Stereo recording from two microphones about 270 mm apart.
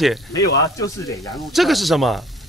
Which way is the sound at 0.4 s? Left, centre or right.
Left.